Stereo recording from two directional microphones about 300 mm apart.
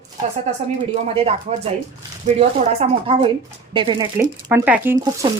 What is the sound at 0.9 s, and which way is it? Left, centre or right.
A woman's voice, centre.